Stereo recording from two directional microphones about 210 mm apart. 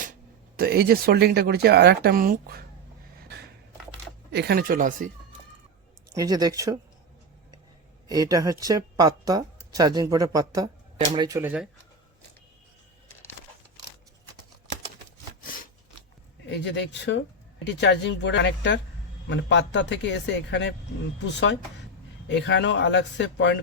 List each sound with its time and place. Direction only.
0.5 s speech: 45° right (ahead or behind)
4.3 s speech: 50° right (ahead or behind)
6.1 s a woman's voice: 20° right (ahead or behind)
8.0 s a woman's voice: 15° right (ahead or behind)
16.5 s speech: 55° left (ahead or behind)